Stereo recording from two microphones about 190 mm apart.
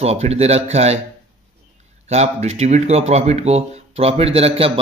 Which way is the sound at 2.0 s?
35° right (ahead or behind).